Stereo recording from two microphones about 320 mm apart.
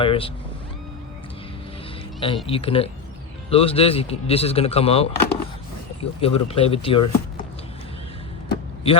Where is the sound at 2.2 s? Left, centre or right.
Centre.